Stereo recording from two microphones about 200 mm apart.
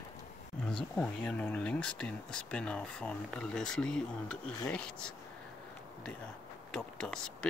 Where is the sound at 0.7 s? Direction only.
5° left (ahead or behind).